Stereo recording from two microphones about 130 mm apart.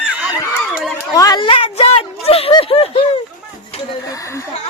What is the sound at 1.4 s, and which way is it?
Speech, 45° left (ahead or behind).